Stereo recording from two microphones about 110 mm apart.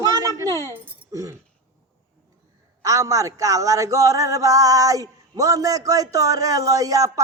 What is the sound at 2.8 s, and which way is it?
Speech, 30° right (ahead or behind).